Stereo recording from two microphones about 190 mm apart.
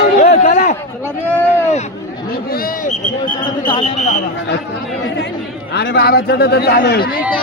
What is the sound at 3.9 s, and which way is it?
Speech, 35° left (ahead or behind).